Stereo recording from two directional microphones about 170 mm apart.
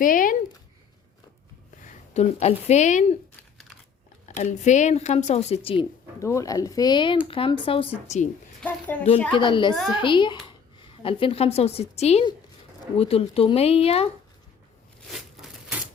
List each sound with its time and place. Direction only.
0.0 s speech: 50° left (ahead or behind)
1.9 s speech: 40° left (ahead or behind)
4.3 s speech: 45° left (ahead or behind)
6.1 s speech: 15° left (ahead or behind); by 8.3 s 40° left (ahead or behind)
8.6 s a woman's voice: 10° left (ahead or behind)
9.3 s a woman's voice: 30° left (ahead or behind)
15.0 s a sound: centre (ahead or behind)